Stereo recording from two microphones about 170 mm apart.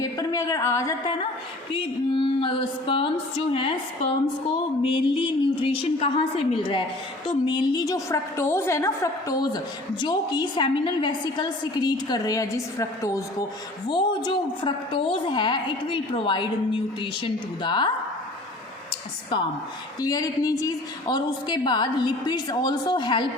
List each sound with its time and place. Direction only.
0.0 s speech: 20° left (ahead or behind)
1.7 s music: 30° left (ahead or behind)
7.3 s a woman's voice: 25° left (ahead or behind)
20.0 s a woman's voice: 20° left (ahead or behind)